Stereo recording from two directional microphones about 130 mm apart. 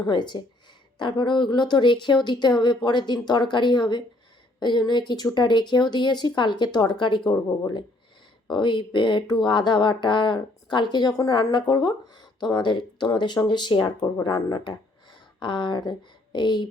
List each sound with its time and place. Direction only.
0.0 s speech: 35° left (ahead or behind)
8.4 s speech: 35° left (ahead or behind)